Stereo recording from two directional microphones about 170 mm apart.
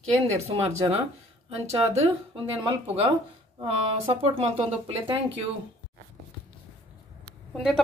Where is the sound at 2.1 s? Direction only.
30° right (ahead or behind).